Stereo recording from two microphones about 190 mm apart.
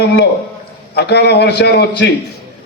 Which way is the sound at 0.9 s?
60° left (ahead or behind).